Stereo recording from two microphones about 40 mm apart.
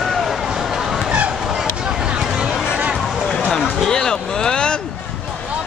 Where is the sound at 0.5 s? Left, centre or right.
Centre.